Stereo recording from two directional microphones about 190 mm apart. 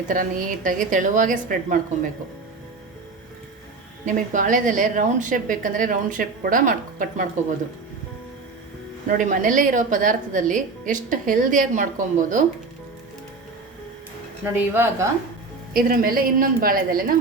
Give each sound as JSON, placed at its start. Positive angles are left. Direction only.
{"t": 0.1, "sound": "a woman's voice", "side_deg": -45}
{"t": 4.0, "sound": "a woman's voice", "side_deg": -45}
{"t": 9.0, "sound": "a woman's voice", "side_deg": -45}
{"t": 14.4, "sound": "speech", "side_deg": -10}
{"t": 15.7, "sound": "a woman's voice", "side_deg": -50}